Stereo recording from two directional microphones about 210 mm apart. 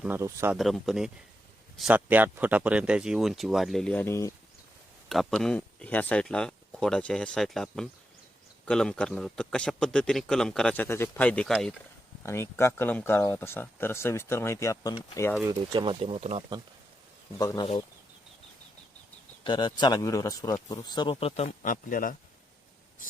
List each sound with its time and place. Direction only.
0.0 s speech: 10° right (ahead or behind)
0.5 s a man's voice: centre (ahead or behind)
5.0 s a man's voice: centre (ahead or behind)
15.4 s speech: 20° right (ahead or behind)
17.3 s speech: 15° left (ahead or behind)
19.5 s speech: 20° left (ahead or behind); by 22.1 s 40° left (ahead or behind)